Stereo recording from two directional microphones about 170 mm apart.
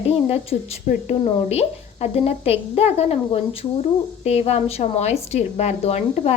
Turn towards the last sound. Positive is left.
turn(degrees=40)  # may be behind; listen again after turning